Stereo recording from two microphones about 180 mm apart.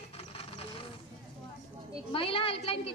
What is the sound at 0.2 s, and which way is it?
Vehicle, 35° left (ahead or behind).